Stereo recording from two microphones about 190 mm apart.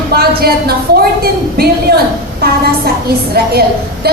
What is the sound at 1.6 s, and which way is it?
Speech, 50° right (ahead or behind).